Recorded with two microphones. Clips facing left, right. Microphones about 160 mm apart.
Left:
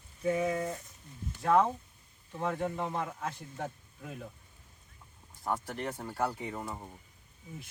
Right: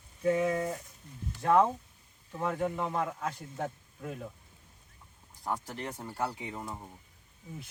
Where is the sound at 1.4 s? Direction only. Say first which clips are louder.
Right 1 dB; 20° right (ahead or behind).